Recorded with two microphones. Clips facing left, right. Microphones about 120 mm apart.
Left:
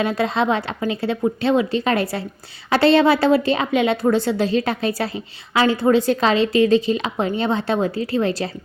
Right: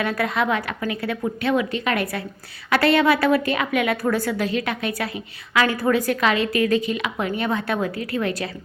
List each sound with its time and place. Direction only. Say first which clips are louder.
0.0 s a woman's voice: left 3 dB; 25° left (ahead or behind)